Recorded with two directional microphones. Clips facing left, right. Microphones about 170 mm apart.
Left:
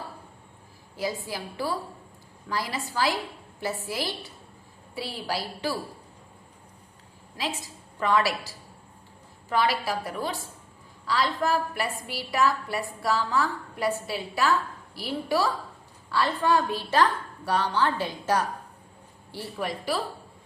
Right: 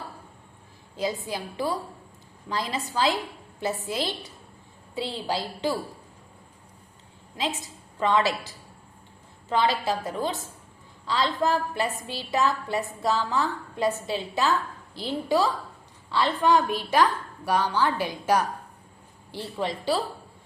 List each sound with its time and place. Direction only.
0.9 s a woman's voice: 20° right (ahead or behind)
7.3 s a woman's voice: 20° right (ahead or behind)